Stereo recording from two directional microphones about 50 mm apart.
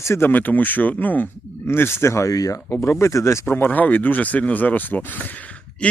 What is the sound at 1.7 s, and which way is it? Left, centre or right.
Speech, left.